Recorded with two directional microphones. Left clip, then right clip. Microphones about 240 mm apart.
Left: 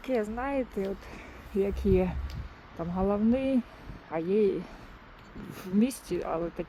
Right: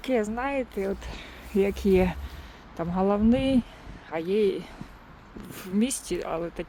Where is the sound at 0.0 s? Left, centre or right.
Centre.